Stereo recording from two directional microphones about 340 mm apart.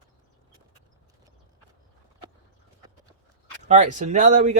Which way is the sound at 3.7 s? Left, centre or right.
Right.